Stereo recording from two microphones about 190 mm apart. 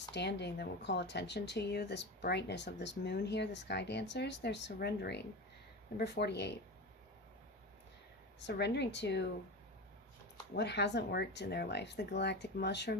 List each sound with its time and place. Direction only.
0.1 s speech: 65° left (ahead or behind)
8.4 s speech: 65° left (ahead or behind)
10.5 s speech: 65° left (ahead or behind)